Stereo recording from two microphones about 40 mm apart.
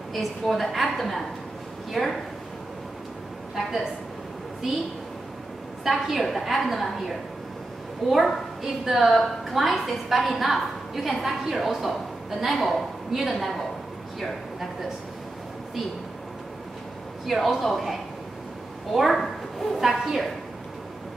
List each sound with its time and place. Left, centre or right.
0.1 s a woman's voice: centre
4.6 s a woman's voice: centre
5.9 s a woman's voice: centre
17.3 s a woman's voice: centre
18.9 s a woman's voice: centre